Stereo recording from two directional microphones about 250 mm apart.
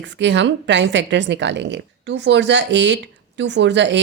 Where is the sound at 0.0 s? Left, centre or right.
Right.